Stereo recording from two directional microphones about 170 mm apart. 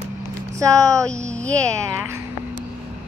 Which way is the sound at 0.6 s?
20° right (ahead or behind).